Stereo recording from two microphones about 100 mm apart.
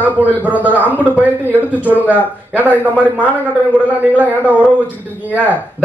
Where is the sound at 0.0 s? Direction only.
15° right (ahead or behind).